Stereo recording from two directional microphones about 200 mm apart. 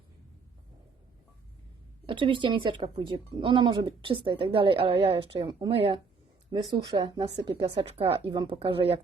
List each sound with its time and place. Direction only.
2.0 s speech: 25° right (ahead or behind)